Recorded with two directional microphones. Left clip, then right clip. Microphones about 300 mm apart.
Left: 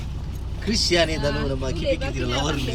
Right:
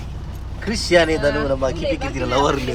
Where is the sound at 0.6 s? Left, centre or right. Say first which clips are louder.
Right 5 dB; centre.